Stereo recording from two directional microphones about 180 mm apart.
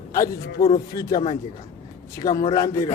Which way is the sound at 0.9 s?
20° left (ahead or behind).